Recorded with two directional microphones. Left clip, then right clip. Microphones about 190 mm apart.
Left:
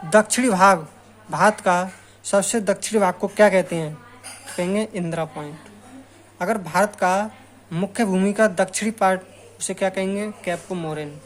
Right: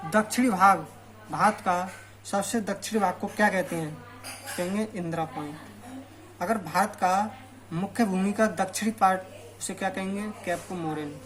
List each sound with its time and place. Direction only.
0.1 s speech: 55° left (ahead or behind)